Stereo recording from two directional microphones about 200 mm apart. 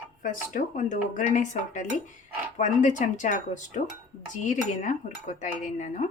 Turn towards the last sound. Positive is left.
turn(degrees=35)  # may be behind; listen again after turning